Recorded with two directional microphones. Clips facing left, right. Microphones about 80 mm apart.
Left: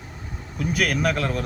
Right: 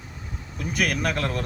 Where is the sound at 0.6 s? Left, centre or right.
Centre.